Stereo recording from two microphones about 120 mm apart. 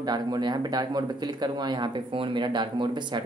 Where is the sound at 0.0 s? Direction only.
35° right (ahead or behind).